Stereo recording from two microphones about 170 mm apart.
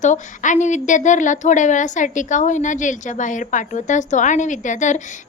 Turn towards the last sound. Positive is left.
turn(degrees=45)  # may be behind; listen again after turning